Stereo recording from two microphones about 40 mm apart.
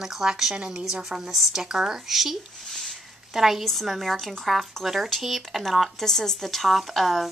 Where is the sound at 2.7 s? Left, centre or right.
Centre.